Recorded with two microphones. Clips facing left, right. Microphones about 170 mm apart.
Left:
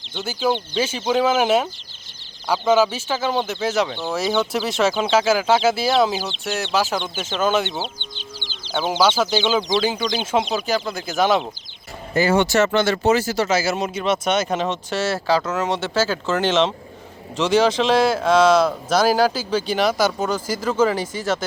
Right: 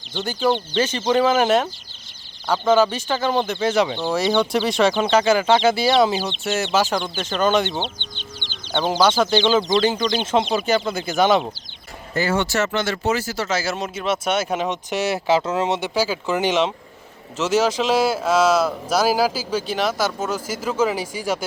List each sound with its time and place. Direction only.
0.2 s speech: 5° left (ahead or behind)
12.1 s speech: 15° left (ahead or behind)
12.7 s speech: 30° left (ahead or behind)
13.6 s speech: 5° left (ahead or behind)